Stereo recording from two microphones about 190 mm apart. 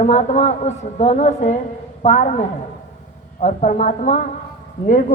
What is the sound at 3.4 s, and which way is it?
A woman's voice, 40° left (ahead or behind).